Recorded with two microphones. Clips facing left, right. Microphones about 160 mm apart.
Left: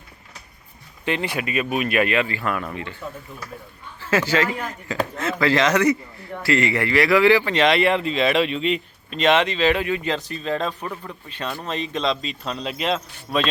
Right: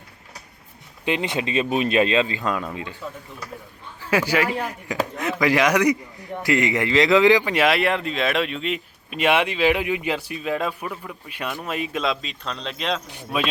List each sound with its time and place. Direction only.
1.0 s speech: 20° right (ahead or behind)
4.0 s a man's voice: 15° right (ahead or behind); by 13.0 s 5° left (ahead or behind)
13.1 s a man's voice: 10° right (ahead or behind)